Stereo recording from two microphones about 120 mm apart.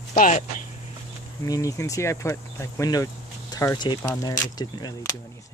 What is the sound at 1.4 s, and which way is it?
Speech, 30° left (ahead or behind).